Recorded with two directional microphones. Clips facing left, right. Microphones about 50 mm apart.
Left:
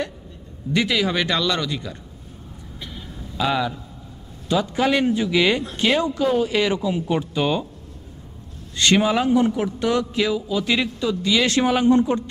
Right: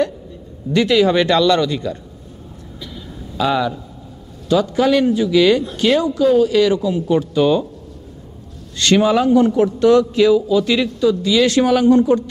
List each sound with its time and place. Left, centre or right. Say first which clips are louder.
0.7 s speech: right 7 dB; centre
3.3 s speech: right 4 dB; centre
4.5 s speech: right 5 dB; left
8.7 s a man's voice: right 4 dB; centre